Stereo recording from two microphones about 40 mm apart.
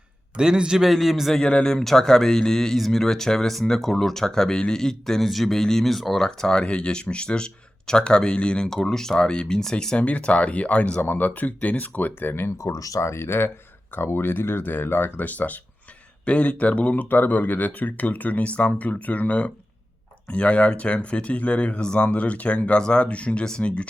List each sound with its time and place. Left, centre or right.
0.3 s a man's voice: right
0.9 s a man's voice: centre
1.5 s speech: left
1.7 s speech: centre
6.6 s speech: left
8.7 s speech: centre
10.0 s speech: left
11.0 s speech: left
13.1 s speech: left
13.9 s speech: left
16.2 s speech: left
16.9 s speech: left